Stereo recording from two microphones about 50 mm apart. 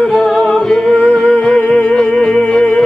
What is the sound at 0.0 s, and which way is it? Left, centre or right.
Music, centre.